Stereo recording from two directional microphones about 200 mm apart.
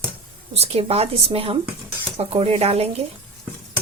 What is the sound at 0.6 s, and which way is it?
A woman's voice, 30° right (ahead or behind).